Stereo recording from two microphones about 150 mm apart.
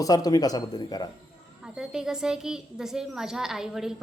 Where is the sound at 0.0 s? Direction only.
25° left (ahead or behind).